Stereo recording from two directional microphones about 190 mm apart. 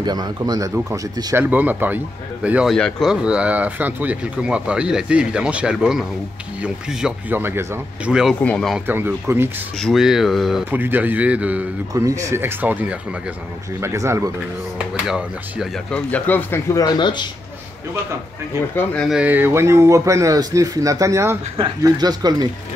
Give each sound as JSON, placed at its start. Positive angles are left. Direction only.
{"t": 0.0, "sound": "speech", "side_deg": -20}
{"t": 8.8, "sound": "speech", "side_deg": -10}
{"t": 9.8, "sound": "speech", "side_deg": 0}
{"t": 15.0, "sound": "speech", "side_deg": -5}
{"t": 18.8, "sound": "speech", "side_deg": 0}